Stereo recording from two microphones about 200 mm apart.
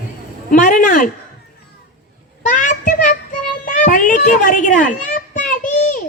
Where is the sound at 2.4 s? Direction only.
40° left (ahead or behind).